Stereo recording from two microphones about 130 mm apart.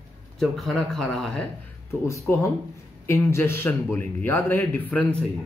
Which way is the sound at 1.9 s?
20° left (ahead or behind).